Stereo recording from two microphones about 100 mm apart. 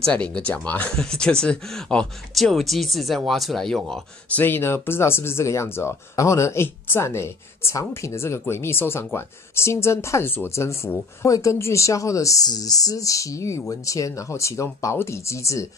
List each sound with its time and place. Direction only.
0.0 s speech: 10° left (ahead or behind)
4.4 s speech: 20° left (ahead or behind)